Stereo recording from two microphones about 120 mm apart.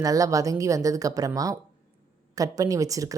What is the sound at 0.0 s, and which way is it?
Speech, 30° right (ahead or behind).